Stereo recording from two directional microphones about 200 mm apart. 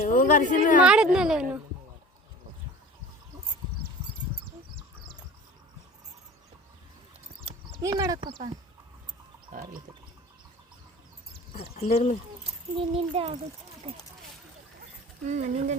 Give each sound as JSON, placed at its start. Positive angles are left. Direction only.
{"t": 0.0, "sound": "a woman's voice", "side_deg": 40}
{"t": 0.8, "sound": "a woman's voice", "side_deg": -5}
{"t": 7.8, "sound": "speech", "side_deg": -15}
{"t": 9.5, "sound": "wild animals", "side_deg": -45}
{"t": 11.6, "sound": "speech", "side_deg": 30}
{"t": 12.7, "sound": "a child's voice", "side_deg": -25}
{"t": 15.3, "sound": "speech", "side_deg": -35}